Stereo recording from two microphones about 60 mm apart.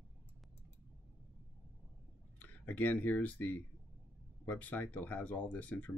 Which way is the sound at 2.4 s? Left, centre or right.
Left.